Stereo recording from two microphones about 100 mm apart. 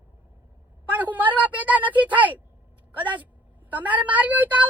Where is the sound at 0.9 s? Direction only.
15° right (ahead or behind).